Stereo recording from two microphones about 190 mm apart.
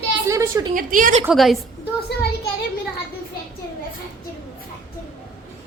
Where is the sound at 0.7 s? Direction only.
45° right (ahead or behind).